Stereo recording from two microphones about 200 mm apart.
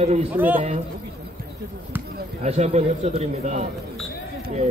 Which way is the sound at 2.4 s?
35° right (ahead or behind).